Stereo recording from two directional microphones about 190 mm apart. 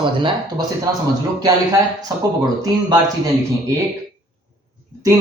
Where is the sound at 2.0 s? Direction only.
20° right (ahead or behind).